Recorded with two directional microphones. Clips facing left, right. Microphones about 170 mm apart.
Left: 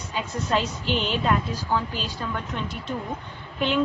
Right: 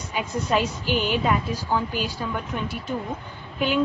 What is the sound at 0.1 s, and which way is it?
A woman's voice, 15° right (ahead or behind).